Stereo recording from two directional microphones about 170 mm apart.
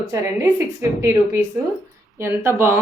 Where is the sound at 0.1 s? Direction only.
15° right (ahead or behind).